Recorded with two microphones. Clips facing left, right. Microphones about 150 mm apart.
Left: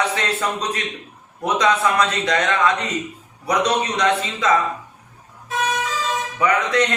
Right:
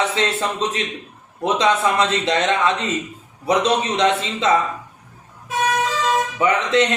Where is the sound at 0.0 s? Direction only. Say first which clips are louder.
Right 1 dB; 25° right (ahead or behind).